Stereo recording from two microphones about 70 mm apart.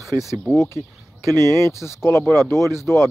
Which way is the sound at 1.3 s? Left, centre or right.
Right.